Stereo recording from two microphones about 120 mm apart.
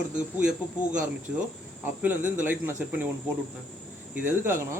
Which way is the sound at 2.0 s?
10° right (ahead or behind).